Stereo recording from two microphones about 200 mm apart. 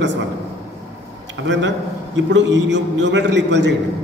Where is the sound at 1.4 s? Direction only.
65° right (ahead or behind).